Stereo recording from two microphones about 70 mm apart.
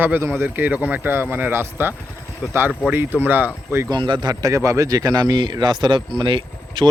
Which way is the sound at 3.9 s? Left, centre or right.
Right.